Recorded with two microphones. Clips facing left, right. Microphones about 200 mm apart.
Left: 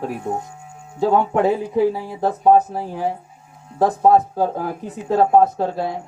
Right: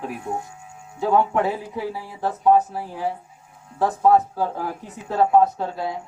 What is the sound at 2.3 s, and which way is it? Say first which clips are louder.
Speech: left 3 dB; 40° left (ahead or behind).